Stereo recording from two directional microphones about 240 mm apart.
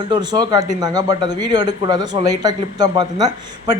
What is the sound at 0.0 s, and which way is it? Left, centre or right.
Speech, centre.